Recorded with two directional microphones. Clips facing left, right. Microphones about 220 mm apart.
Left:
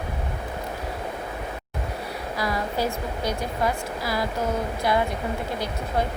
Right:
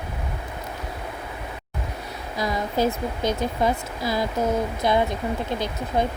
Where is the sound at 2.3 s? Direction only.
20° right (ahead or behind).